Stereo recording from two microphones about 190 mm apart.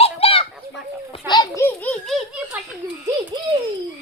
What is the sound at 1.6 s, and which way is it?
A child's voice, 5° left (ahead or behind).